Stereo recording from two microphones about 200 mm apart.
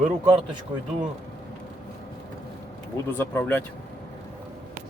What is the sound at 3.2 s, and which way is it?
Speech, 10° left (ahead or behind).